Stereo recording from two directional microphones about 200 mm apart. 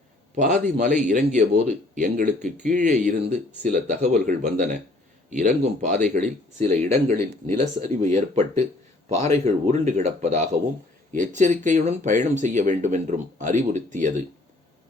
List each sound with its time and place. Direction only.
0.3 s speech: 40° right (ahead or behind)